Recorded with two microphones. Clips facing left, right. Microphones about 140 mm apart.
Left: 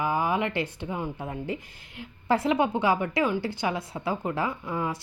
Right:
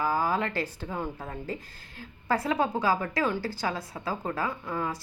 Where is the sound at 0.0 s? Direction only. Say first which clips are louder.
Left 1 dB; 20° left (ahead or behind).